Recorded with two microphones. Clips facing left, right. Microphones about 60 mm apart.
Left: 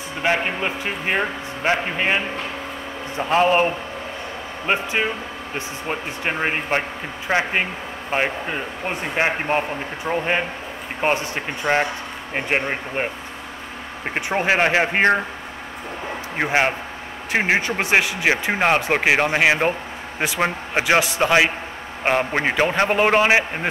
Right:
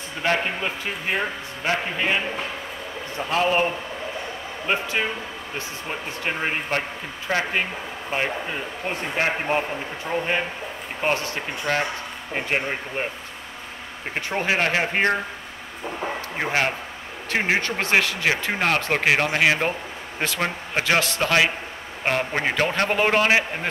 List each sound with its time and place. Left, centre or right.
0.2 s a man's voice: centre
5.9 s a man's voice: left
16.3 s a man's voice: left